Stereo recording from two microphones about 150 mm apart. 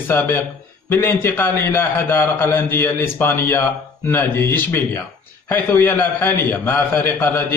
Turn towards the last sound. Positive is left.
turn(degrees=15)  # may be behind; listen again after turning